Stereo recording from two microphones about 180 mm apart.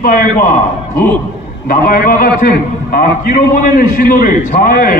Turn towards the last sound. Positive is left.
turn(degrees=55)  # may be behind; listen again after turning